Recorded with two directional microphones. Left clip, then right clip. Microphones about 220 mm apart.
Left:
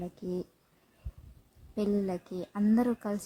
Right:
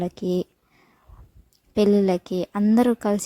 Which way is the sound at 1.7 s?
40° right (ahead or behind).